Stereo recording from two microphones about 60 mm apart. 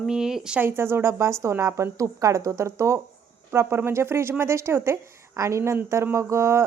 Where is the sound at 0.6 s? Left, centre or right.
Right.